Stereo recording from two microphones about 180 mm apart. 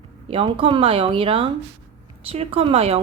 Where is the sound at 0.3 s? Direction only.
30° right (ahead or behind).